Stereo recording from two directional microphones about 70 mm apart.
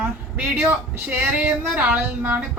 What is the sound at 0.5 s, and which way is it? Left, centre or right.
A woman's voice, right.